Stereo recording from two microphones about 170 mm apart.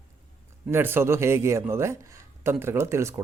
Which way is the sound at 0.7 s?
10° right (ahead or behind).